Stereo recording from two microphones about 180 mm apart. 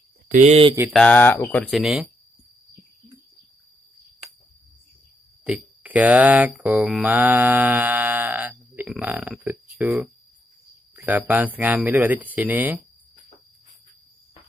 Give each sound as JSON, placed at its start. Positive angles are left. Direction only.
{"t": 0.3, "sound": "speech", "side_deg": -40}
{"t": 0.9, "sound": "speech", "side_deg": 10}
{"t": 1.7, "sound": "speech", "side_deg": 0}
{"t": 5.4, "sound": "speech", "side_deg": -10}